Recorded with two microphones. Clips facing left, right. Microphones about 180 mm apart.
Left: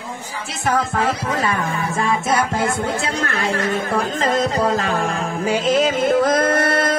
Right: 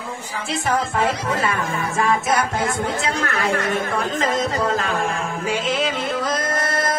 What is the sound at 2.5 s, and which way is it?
Music, 30° left (ahead or behind).